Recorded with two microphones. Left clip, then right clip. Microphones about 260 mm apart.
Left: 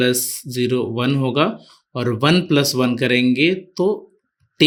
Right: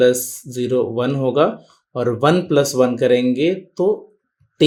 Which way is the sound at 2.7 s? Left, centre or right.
Left.